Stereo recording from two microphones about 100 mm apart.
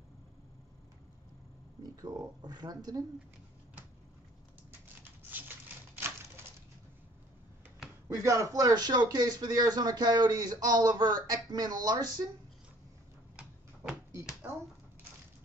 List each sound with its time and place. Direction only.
1.8 s speech: 40° right (ahead or behind)
5.9 s a sound: 25° right (ahead or behind)
8.1 s speech: 30° right (ahead or behind)